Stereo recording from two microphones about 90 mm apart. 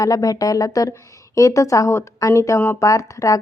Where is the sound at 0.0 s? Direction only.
40° left (ahead or behind).